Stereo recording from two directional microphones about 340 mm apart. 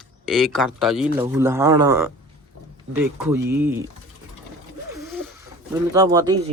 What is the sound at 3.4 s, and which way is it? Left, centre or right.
Speech, centre.